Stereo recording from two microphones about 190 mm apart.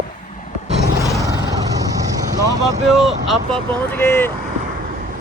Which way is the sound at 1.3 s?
20° right (ahead or behind).